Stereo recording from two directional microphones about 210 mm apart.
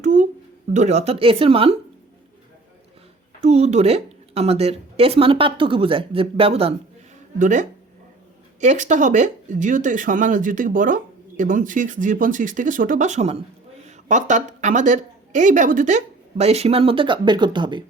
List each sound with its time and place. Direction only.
0.0 s a sound: 35° right (ahead or behind)
0.7 s a woman's voice: 35° right (ahead or behind)
3.4 s a woman's voice: 30° right (ahead or behind)
7.3 s speech: 40° right (ahead or behind); by 17.8 s 20° right (ahead or behind)